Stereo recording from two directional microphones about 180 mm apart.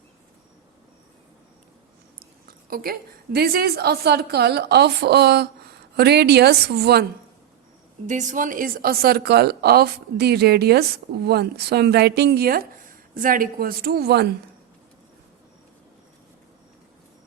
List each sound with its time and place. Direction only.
2.1 s a woman's voice: 55° right (ahead or behind)
8.0 s a woman's voice: 45° right (ahead or behind); by 14.3 s 65° right (ahead or behind)